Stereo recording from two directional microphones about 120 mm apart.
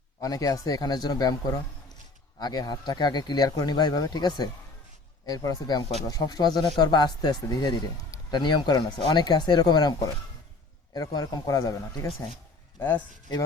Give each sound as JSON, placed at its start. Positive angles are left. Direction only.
{"t": 0.2, "sound": "a man's voice", "side_deg": 30}
{"t": 2.4, "sound": "a man's voice", "side_deg": 35}